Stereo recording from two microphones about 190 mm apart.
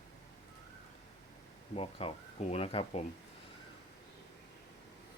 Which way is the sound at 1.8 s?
30° left (ahead or behind).